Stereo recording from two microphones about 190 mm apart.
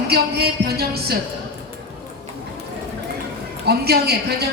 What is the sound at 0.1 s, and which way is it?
Music, 55° right (ahead or behind).